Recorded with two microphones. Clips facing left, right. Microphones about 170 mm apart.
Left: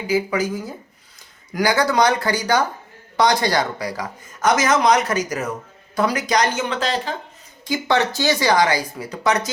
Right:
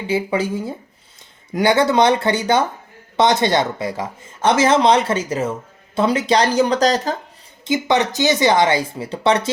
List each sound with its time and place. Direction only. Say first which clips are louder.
0.1 s speech: right 1 dB; 25° right (ahead or behind)
7.6 s speech: right 2 dB; 20° right (ahead or behind)